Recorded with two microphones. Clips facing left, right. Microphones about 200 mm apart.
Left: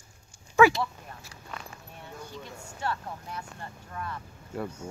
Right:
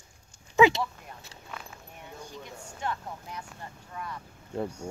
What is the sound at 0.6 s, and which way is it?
Dog, 20° right (ahead or behind).